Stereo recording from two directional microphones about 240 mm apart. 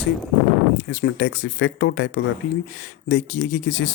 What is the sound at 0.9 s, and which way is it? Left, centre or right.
Speech, left.